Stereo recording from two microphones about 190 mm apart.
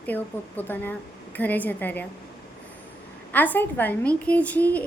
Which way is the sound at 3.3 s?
10° left (ahead or behind).